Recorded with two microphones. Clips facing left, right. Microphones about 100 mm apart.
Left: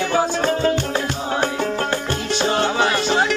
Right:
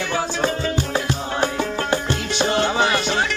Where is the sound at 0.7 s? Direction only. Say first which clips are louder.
Left 1 dB; 5° right (ahead or behind).